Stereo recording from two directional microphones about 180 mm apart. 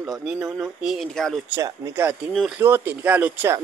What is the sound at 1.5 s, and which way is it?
Speech, 15° right (ahead or behind).